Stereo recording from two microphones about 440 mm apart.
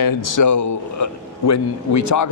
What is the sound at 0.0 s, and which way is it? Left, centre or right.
A man's voice, left.